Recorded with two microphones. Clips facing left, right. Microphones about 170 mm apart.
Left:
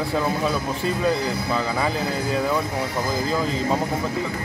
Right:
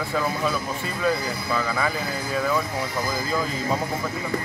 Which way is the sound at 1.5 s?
20° left (ahead or behind).